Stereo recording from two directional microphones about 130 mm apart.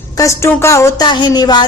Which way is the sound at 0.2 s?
20° left (ahead or behind).